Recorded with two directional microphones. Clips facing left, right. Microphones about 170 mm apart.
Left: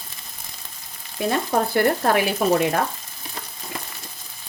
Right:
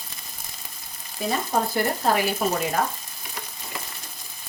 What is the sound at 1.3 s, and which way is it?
Speech, 60° left (ahead or behind).